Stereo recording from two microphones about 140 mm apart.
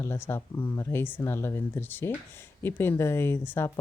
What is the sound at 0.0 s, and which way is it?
Speech, 15° left (ahead or behind).